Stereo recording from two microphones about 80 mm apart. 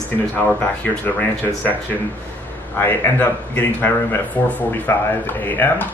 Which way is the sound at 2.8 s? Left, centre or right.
Left.